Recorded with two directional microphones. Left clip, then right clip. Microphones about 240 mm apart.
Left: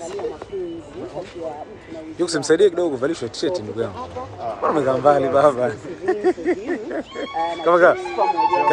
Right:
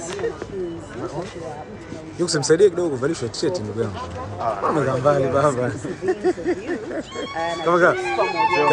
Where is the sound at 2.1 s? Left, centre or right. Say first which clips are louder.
Even; centre.